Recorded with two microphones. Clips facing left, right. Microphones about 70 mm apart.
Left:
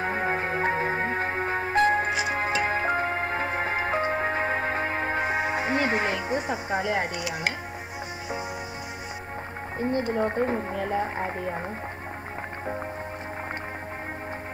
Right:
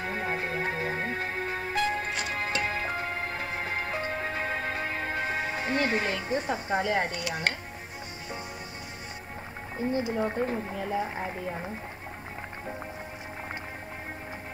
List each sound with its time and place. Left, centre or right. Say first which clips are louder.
0.0 s music: left 5 dB; left
6.1 s speech: left 2 dB; centre
9.8 s speech: left 3 dB; left